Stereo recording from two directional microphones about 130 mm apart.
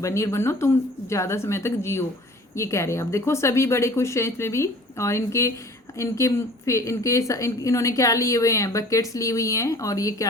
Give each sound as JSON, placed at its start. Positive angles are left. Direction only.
{"t": 0.0, "sound": "a woman's voice", "side_deg": 20}